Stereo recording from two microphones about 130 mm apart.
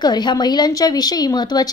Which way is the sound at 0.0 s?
35° left (ahead or behind).